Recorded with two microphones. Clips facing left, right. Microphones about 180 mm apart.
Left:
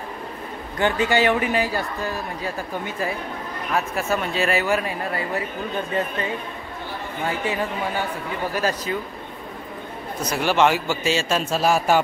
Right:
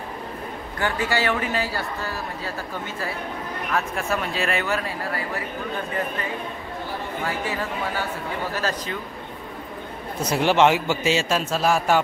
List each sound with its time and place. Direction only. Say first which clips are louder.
0.7 s a man's voice: left 5 dB; 20° left (ahead or behind)
3.7 s speech: left 2 dB; 5° left (ahead or behind)
4.6 s speech: left 3 dB; 15° left (ahead or behind)
7.2 s a man's voice: left 4 dB; 20° left (ahead or behind)
10.3 s a man's voice: right 1 dB; 20° right (ahead or behind)
11.3 s speech: left 1 dB; centre (ahead or behind)